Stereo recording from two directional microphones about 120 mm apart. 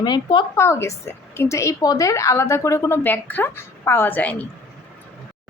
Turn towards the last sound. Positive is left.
turn(degrees=10)  # may be behind; listen again after turning